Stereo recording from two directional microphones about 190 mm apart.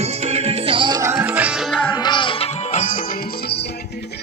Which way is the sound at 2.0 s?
25° left (ahead or behind).